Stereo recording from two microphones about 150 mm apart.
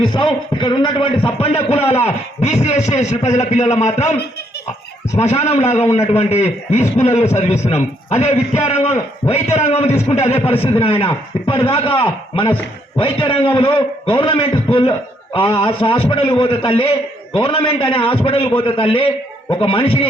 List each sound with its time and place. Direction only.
0.0 s a man's voice: 35° left (ahead or behind)
5.3 s a man's voice: 45° left (ahead or behind)